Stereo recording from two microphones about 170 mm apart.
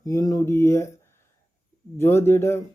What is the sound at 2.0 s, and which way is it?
Speech, 15° left (ahead or behind).